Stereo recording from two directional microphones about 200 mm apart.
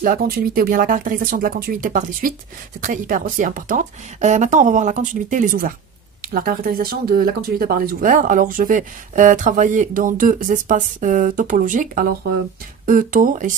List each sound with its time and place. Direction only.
0.0 s a woman's voice: 45° right (ahead or behind)